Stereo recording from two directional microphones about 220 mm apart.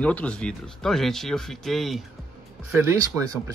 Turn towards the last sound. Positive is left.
turn(degrees=-15)  # may be behind; listen again after turning